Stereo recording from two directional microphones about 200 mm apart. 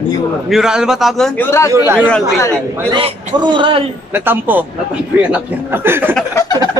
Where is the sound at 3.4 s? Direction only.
25° right (ahead or behind).